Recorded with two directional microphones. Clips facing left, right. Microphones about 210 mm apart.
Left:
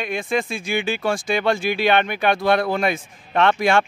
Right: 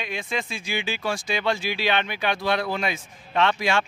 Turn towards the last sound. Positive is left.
turn(degrees=55)  # may be behind; listen again after turning